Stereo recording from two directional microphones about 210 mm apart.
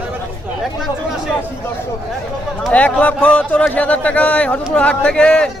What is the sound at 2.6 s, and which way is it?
Speech, 5° left (ahead or behind).